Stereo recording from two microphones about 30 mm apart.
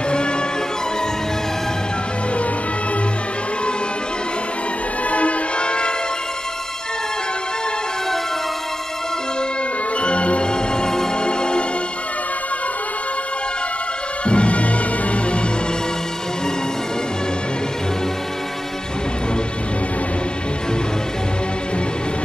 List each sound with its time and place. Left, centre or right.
5.1 s music: left
5.7 s music: left
9.9 s music: left
10.5 s music: left
14.2 s music: left